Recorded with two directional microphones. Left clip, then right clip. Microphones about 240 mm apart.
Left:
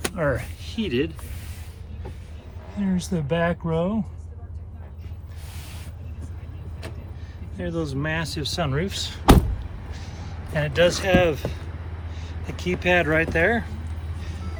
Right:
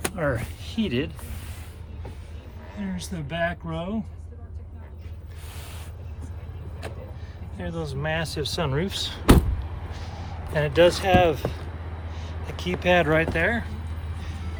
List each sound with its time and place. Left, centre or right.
0.0 s speech: centre
2.9 s speech: centre
7.6 s speech: centre